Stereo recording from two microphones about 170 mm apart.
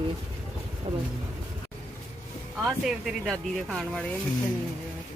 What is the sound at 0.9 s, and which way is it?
Speech, 30° right (ahead or behind).